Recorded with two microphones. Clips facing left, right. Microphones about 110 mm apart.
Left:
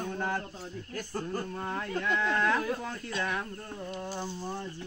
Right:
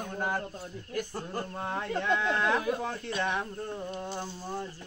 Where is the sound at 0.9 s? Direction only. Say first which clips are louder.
Right 1 dB; 20° right (ahead or behind).